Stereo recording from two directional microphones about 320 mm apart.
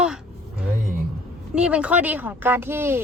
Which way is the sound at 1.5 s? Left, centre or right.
Centre.